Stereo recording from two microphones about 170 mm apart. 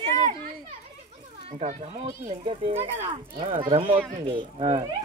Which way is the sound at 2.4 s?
40° right (ahead or behind).